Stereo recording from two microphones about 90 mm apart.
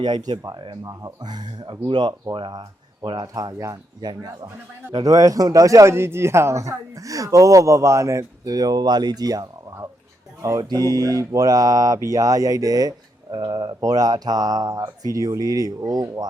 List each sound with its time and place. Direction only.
0.0 s speech: 55° right (ahead or behind)
3.2 s speech: 45° right (ahead or behind)